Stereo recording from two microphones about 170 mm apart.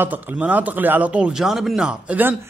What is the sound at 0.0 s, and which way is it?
A man's voice, 10° right (ahead or behind).